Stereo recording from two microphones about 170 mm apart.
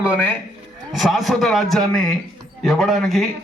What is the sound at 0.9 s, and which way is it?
A man's voice, centre (ahead or behind).